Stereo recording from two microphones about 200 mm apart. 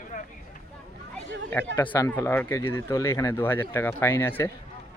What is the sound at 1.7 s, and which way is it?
Speech, 15° left (ahead or behind).